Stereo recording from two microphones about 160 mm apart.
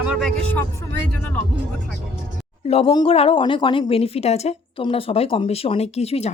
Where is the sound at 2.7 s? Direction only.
40° left (ahead or behind).